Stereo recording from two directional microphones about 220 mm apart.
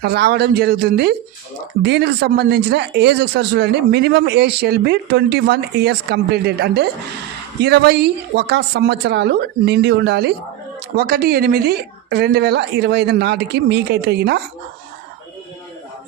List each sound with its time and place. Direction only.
0.0 s speech: 45° right (ahead or behind)